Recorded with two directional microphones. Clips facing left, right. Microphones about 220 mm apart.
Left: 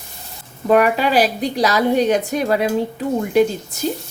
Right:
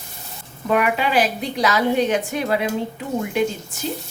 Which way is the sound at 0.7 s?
40° left (ahead or behind).